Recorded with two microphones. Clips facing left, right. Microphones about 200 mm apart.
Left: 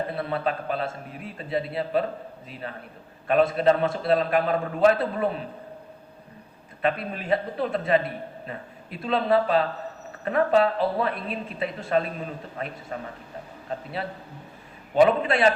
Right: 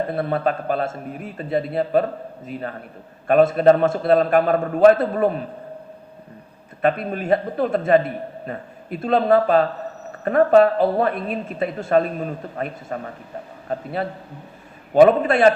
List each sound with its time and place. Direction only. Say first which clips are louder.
0.1 s a man's voice: right 6 dB; 50° right (ahead or behind)
6.8 s a man's voice: right 6 dB; 50° right (ahead or behind)